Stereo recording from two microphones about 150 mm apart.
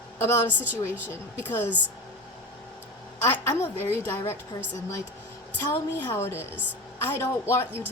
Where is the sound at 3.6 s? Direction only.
15° left (ahead or behind).